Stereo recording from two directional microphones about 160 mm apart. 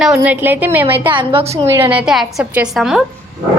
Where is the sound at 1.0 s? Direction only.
30° right (ahead or behind).